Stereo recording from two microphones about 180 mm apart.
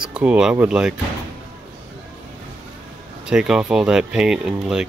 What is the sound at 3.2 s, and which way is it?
Speech, 5° right (ahead or behind).